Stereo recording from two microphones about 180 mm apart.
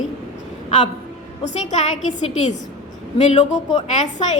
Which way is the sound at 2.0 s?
40° left (ahead or behind).